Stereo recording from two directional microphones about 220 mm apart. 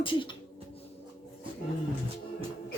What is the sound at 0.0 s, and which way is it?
Speech, 25° left (ahead or behind).